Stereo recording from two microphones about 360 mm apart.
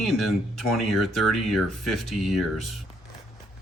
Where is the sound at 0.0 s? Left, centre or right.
Centre.